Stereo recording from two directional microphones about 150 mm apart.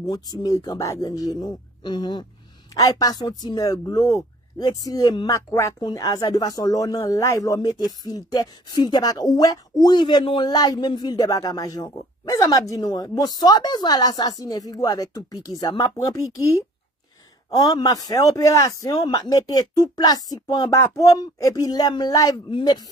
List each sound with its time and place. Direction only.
0.0 s speech: 25° left (ahead or behind)